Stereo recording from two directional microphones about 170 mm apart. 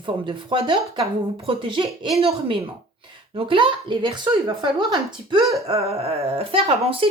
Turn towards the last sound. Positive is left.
turn(degrees=-35)  # may be behind; listen again after turning